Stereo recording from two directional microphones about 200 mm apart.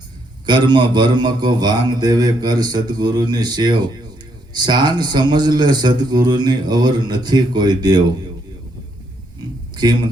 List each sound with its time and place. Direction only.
0.4 s a man's voice: 20° right (ahead or behind)
9.7 s a man's voice: 20° right (ahead or behind)